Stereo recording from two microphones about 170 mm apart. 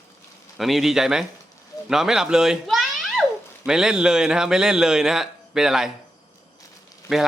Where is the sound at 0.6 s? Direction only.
Centre (ahead or behind).